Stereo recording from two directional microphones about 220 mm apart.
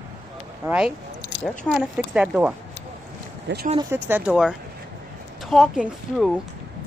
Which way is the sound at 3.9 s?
10° right (ahead or behind).